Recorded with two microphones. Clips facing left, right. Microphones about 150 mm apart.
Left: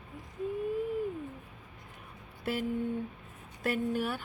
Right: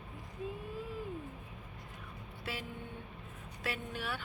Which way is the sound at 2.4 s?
50° left (ahead or behind).